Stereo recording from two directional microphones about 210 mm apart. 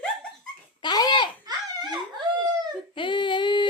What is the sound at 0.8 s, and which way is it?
Dog, 20° left (ahead or behind).